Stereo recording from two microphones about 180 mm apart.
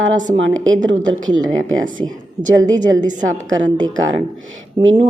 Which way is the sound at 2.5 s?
20° right (ahead or behind).